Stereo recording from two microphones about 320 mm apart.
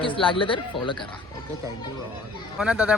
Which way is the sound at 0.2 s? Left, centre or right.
Centre.